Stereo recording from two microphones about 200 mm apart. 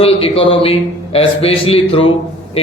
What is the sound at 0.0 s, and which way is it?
A man's voice, 30° left (ahead or behind).